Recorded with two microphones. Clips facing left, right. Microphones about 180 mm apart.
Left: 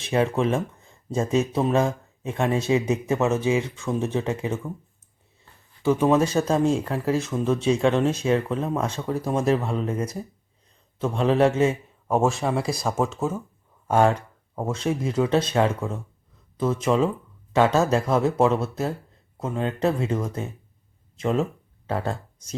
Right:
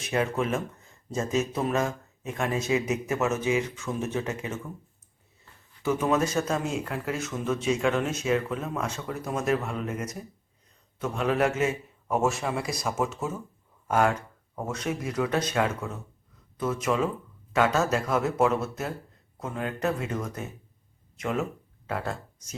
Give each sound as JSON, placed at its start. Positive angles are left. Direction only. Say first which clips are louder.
{"t": 0.0, "sound": "a man's voice", "louder": "left 5 dB", "side_deg": 30}
{"t": 5.8, "sound": "a man's voice", "louder": "left 5 dB", "side_deg": 30}